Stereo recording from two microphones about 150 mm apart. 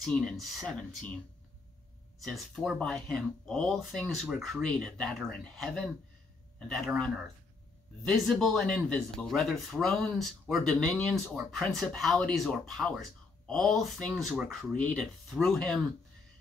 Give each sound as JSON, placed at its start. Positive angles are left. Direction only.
{"t": 0.0, "sound": "speech", "side_deg": 0}
{"t": 2.2, "sound": "speech", "side_deg": 0}